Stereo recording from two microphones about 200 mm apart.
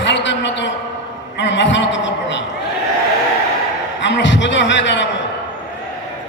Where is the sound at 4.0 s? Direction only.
65° left (ahead or behind).